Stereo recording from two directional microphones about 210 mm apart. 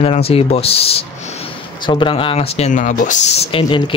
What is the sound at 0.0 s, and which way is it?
Speech, 30° left (ahead or behind).